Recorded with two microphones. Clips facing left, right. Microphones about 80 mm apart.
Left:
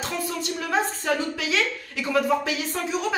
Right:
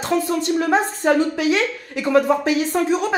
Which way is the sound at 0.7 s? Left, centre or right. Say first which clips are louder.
Right 4 dB; right.